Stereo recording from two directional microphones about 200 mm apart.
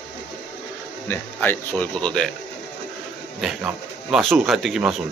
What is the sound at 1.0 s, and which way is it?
Speech, 10° left (ahead or behind).